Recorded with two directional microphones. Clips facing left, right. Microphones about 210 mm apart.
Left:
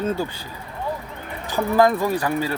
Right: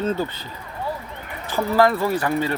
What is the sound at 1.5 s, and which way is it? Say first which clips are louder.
Speech: left 1 dB; 15° left (ahead or behind).